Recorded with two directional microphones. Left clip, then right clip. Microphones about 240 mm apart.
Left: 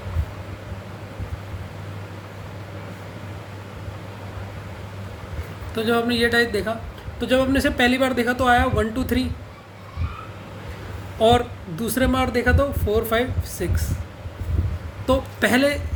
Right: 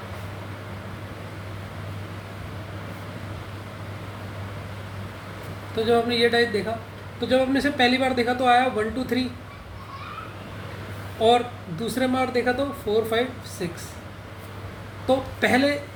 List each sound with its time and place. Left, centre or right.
5.7 s a woman's voice: left
11.2 s a woman's voice: left
15.0 s a woman's voice: left